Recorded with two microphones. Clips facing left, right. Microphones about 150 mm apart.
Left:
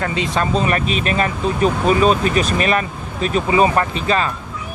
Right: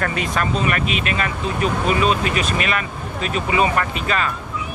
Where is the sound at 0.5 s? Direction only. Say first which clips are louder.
Left 3 dB; 35° left (ahead or behind).